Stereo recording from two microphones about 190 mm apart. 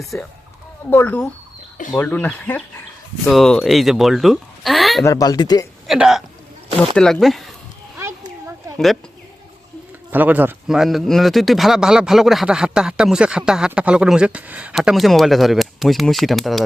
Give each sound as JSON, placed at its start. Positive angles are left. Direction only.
{"t": 0.0, "sound": "a man's voice", "side_deg": 0}
{"t": 5.0, "sound": "speech", "side_deg": 20}
{"t": 5.9, "sound": "a man's voice", "side_deg": 0}
{"t": 10.1, "sound": "a man's voice", "side_deg": -10}